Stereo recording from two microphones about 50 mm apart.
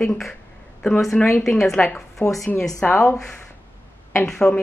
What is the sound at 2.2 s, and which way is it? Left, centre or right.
Speech, left.